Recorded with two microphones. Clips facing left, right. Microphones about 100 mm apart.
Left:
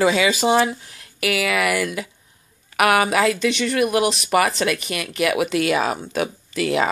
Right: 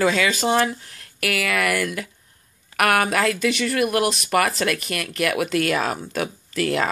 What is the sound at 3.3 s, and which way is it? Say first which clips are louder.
Speech: left 1 dB; 5° right (ahead or behind).